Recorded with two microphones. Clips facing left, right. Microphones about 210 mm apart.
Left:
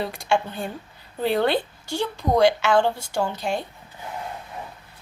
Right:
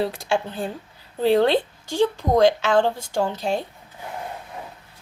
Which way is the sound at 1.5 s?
90° right.